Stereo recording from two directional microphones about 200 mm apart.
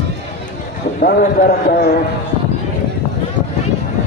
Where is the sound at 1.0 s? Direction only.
45° left (ahead or behind).